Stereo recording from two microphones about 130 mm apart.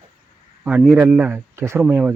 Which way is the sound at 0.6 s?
5° right (ahead or behind).